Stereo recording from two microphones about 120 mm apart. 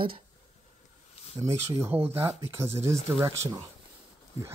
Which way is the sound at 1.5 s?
20° right (ahead or behind).